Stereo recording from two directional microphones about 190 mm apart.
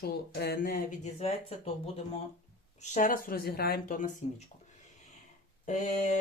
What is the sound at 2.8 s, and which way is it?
Speech, 45° left (ahead or behind).